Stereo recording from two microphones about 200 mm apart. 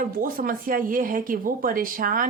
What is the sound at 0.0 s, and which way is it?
Speech, 45° right (ahead or behind).